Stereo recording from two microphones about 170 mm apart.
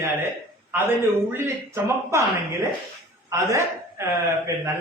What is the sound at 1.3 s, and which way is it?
Speech, 15° right (ahead or behind).